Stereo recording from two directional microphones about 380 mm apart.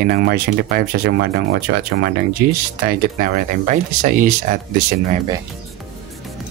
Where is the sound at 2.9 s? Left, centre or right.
Right.